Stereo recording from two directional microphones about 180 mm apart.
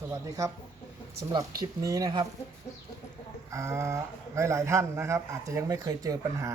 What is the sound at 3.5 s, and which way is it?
Speech, 15° right (ahead or behind).